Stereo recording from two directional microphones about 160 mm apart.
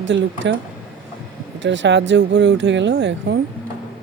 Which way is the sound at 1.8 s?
90° right.